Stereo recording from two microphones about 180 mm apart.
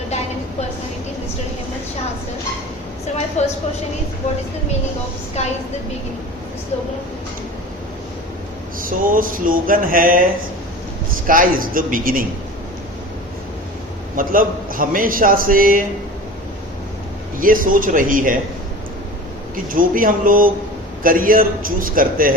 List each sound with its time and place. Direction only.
3.4 s a woman's voice: 40° left (ahead or behind)
8.8 s a man's voice: 50° right (ahead or behind)
11.3 s a man's voice: 50° right (ahead or behind)
14.2 s a man's voice: 50° right (ahead or behind)
17.3 s a man's voice: 50° right (ahead or behind)
19.7 s a man's voice: 50° right (ahead or behind)